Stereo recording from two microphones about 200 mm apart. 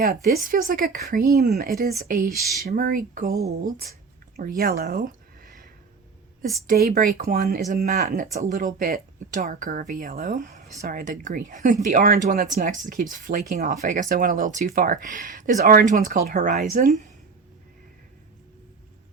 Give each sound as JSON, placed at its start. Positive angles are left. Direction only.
{"t": 0.0, "sound": "speech", "side_deg": -50}
{"t": 4.4, "sound": "a sound", "side_deg": -45}
{"t": 6.7, "sound": "speech", "side_deg": -50}